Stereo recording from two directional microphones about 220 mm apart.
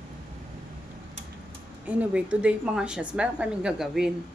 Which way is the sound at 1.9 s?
5° right (ahead or behind).